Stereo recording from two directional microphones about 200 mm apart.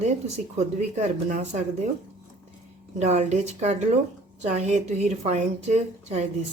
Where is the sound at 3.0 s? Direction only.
35° right (ahead or behind).